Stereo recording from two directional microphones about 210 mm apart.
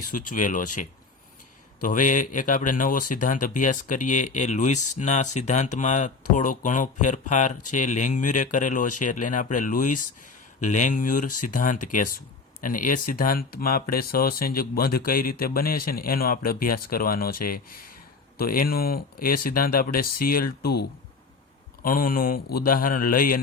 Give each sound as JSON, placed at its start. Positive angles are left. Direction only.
{"t": 0.1, "sound": "speech", "side_deg": 40}
{"t": 21.8, "sound": "speech", "side_deg": 40}